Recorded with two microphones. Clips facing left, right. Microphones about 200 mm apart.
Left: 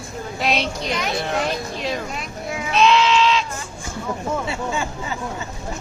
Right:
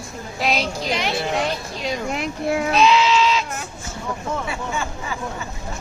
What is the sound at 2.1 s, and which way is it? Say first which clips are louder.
Speech: right 7 dB; 65° right (ahead or behind).